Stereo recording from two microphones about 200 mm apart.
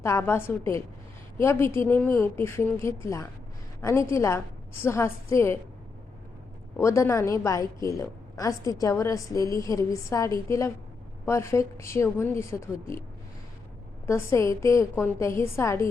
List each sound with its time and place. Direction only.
0.0 s a woman's voice: 15° left (ahead or behind)
6.7 s a woman's voice: 15° left (ahead or behind)
14.1 s a woman's voice: 15° left (ahead or behind)